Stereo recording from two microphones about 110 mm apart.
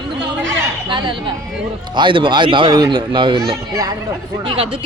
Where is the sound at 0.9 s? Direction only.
45° right (ahead or behind).